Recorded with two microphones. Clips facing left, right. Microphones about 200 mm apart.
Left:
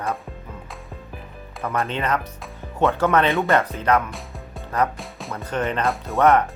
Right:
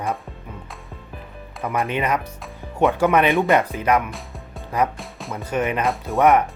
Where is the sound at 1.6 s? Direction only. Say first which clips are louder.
Right 1 dB; 15° right (ahead or behind).